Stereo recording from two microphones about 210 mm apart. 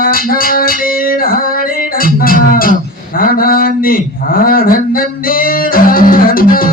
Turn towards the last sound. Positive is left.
turn(degrees=40)  # may be behind; listen again after turning